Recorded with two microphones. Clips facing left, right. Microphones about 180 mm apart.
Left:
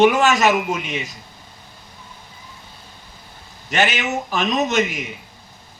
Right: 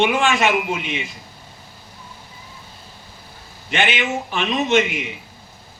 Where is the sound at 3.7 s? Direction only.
40° left (ahead or behind).